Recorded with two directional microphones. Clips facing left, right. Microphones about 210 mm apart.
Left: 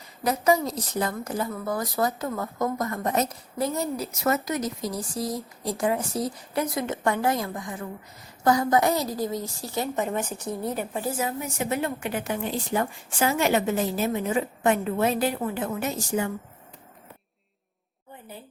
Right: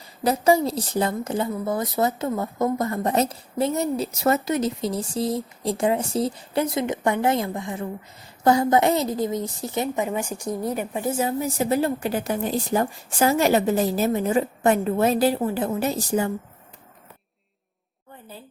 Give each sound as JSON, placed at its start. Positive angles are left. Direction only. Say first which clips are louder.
{"t": 0.2, "sound": "a woman's voice", "louder": "right 3 dB", "side_deg": -30}
{"t": 6.8, "sound": "a woman's voice", "louder": "right 3 dB", "side_deg": -15}
{"t": 9.9, "sound": "a woman's voice", "louder": "right 2 dB", "side_deg": -10}
{"t": 11.2, "sound": "a woman's voice", "louder": "right 5 dB", "side_deg": -30}